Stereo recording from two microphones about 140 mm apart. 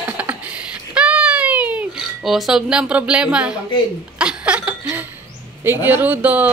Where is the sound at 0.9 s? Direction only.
10° right (ahead or behind).